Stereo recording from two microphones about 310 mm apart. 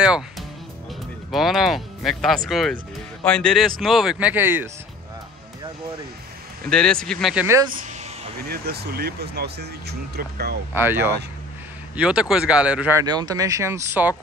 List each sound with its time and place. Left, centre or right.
0.0 s music: centre
1.3 s speech: centre
6.7 s speech: centre
8.5 s speech: right
10.7 s speech: centre